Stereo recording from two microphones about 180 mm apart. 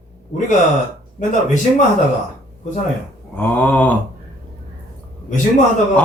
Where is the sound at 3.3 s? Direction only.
10° left (ahead or behind).